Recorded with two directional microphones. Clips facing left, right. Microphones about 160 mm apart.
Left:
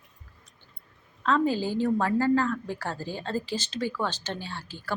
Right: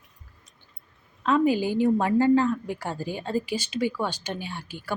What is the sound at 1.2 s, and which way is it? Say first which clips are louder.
A woman's voice: right 3 dB; 15° right (ahead or behind).